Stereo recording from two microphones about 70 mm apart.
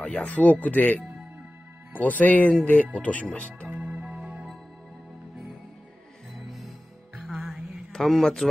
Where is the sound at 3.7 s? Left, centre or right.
Centre.